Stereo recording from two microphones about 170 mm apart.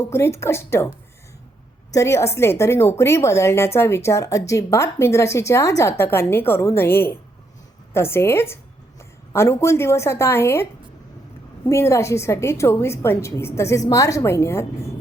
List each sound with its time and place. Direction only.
0.0 s a woman's voice: 15° left (ahead or behind)
1.9 s a woman's voice: 20° left (ahead or behind)